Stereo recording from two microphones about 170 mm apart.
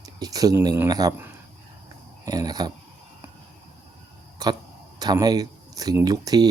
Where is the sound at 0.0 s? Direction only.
20° right (ahead or behind).